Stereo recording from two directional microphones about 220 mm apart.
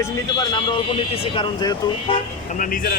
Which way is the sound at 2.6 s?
40° left (ahead or behind).